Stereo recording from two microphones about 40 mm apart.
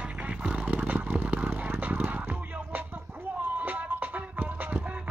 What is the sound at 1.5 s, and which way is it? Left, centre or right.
Fowl, right.